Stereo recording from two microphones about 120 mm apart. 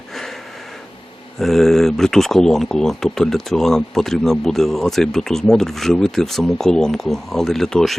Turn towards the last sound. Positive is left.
turn(degrees=5)  # may be behind; listen again after turning